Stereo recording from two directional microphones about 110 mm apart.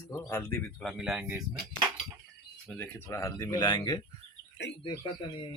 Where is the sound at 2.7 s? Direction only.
25° left (ahead or behind); by 4.0 s 40° left (ahead or behind).